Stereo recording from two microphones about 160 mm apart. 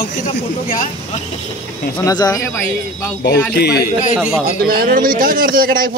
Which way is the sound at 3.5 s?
85° left.